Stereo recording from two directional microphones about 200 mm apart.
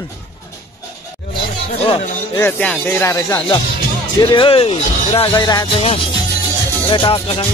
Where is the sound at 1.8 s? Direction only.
30° left (ahead or behind).